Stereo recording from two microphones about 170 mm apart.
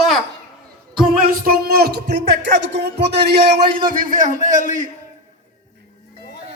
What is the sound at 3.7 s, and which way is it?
Speech, 55° right (ahead or behind).